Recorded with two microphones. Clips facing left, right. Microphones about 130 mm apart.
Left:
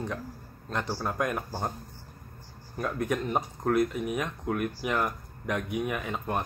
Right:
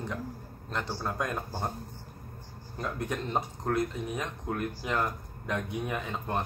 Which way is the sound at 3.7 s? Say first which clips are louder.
Left 4 dB; 15° left (ahead or behind).